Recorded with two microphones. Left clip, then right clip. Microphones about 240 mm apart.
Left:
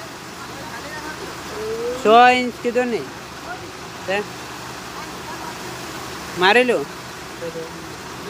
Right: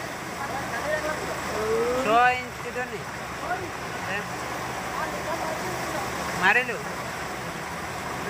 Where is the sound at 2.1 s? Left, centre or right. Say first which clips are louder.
Left 11 dB; left.